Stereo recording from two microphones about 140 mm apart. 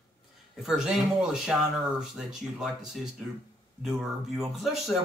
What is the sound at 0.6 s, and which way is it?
Speech, 5° right (ahead or behind).